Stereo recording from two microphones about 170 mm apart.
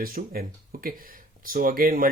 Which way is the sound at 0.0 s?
60° right (ahead or behind).